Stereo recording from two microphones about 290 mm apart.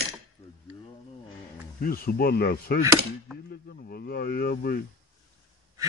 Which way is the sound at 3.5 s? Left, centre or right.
Left.